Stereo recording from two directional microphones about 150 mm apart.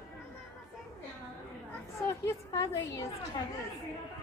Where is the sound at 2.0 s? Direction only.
20° left (ahead or behind).